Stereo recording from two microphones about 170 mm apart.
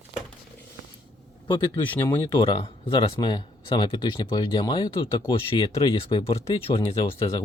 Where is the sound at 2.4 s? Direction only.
30° left (ahead or behind).